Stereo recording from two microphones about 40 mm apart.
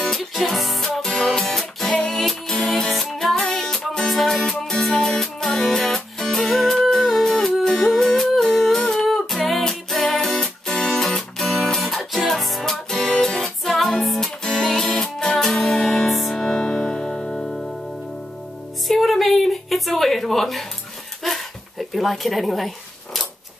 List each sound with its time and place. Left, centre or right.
0.3 s music: centre
4.1 s music: centre
4.4 s music: centre
12.9 s music: centre
16.3 s music: centre
18.9 s a sound: centre